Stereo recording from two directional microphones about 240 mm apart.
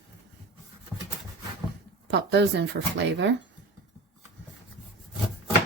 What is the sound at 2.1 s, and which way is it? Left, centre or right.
Speech, right.